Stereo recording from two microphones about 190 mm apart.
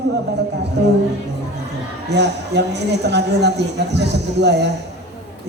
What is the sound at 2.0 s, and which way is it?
A woman's voice, 65° right (ahead or behind).